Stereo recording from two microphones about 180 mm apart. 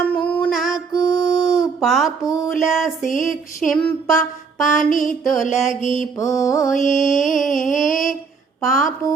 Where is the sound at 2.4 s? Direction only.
Centre (ahead or behind).